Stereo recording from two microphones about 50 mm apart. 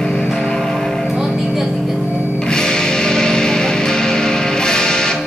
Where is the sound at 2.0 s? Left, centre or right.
Right.